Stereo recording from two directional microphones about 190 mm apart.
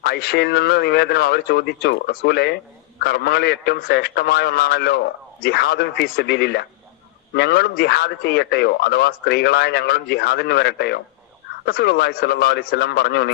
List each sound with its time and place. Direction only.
0.0 s a man's voice: 55° left (ahead or behind)